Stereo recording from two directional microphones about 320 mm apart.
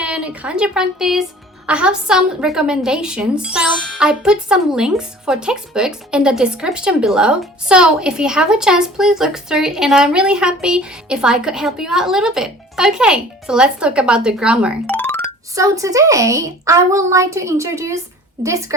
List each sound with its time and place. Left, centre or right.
0.0 s a woman's voice: centre
15.5 s a woman's voice: centre